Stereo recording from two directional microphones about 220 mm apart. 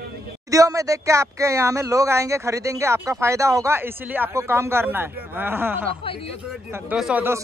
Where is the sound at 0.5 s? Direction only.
15° right (ahead or behind).